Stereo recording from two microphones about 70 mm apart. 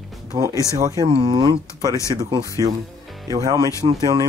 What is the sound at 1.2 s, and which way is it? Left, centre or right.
Speech, right.